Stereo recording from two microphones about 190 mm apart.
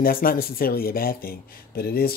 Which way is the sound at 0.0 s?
50° left (ahead or behind).